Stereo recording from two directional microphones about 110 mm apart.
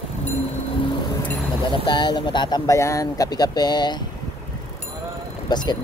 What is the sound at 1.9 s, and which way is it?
Speech, 45° left (ahead or behind).